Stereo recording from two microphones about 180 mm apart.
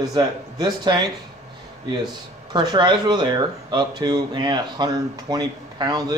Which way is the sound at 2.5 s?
25° right (ahead or behind).